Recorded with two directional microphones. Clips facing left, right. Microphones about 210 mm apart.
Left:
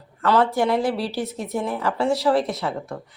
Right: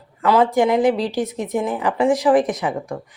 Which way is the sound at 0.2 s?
15° right (ahead or behind).